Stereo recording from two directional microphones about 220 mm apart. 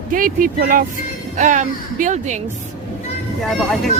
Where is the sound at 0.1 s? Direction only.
40° right (ahead or behind).